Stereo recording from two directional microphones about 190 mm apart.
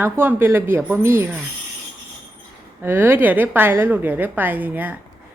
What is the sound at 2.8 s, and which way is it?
A woman's voice, 10° right (ahead or behind).